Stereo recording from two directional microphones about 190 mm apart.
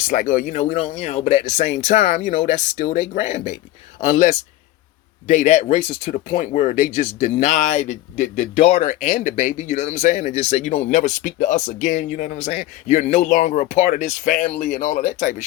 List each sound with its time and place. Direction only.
0.1 s speech: 45° left (ahead or behind)